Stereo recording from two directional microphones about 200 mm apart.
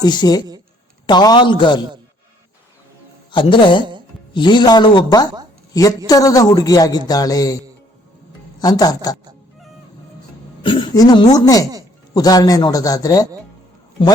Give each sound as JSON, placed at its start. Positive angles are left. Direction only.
{"t": 0.0, "sound": "speech", "side_deg": 20}
{"t": 3.3, "sound": "speech", "side_deg": 25}
{"t": 8.6, "sound": "speech", "side_deg": 20}
{"t": 10.6, "sound": "speech", "side_deg": 25}